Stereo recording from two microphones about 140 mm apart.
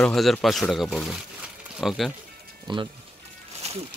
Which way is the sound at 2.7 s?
35° right (ahead or behind).